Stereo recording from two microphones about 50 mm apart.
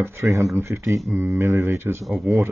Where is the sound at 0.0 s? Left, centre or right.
Right.